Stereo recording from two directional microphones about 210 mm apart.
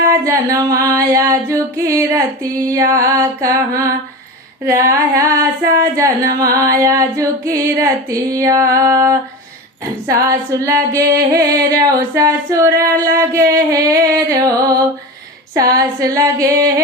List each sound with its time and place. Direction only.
0.3 s female singing: 15° right (ahead or behind)